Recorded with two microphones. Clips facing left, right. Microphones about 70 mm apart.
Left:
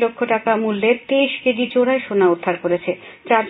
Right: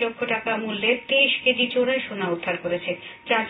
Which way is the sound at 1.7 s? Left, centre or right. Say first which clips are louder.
Left 7 dB; left.